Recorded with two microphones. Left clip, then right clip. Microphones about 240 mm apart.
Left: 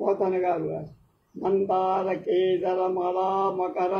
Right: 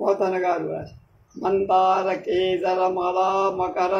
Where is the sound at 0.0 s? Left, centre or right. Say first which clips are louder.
Right 3 dB; right.